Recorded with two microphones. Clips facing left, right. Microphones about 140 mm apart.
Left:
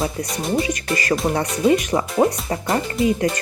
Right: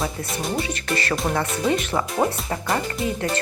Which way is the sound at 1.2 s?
25° left (ahead or behind).